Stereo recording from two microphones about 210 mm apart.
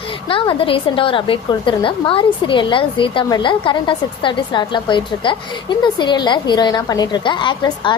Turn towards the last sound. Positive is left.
turn(degrees=20)  # may be behind; listen again after turning